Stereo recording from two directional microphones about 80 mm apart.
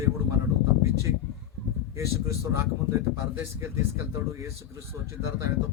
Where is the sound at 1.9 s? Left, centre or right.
Right.